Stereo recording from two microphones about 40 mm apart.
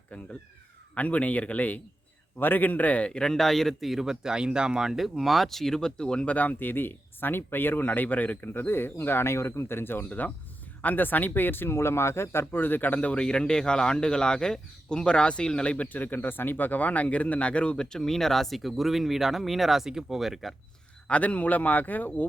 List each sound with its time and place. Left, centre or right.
0.9 s speech: left
2.4 s speech: left
3.1 s speech: centre
3.3 s speech: centre; by 6.3 s left
6.3 s speech: left
8.4 s speech: left
10.1 s speech: left
13.1 s speech: left
15.9 s speech: left; by 20.5 s centre
21.1 s speech: left